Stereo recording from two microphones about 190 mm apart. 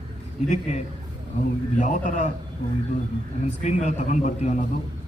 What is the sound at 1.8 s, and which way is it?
Speech, 40° left (ahead or behind).